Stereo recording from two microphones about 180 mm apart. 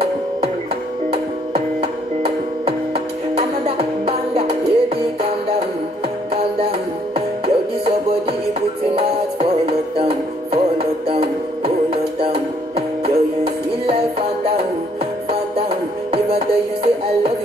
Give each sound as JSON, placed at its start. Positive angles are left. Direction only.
{"t": 1.1, "sound": "music", "side_deg": -35}
{"t": 7.2, "sound": "music", "side_deg": -30}
{"t": 16.1, "sound": "music", "side_deg": -35}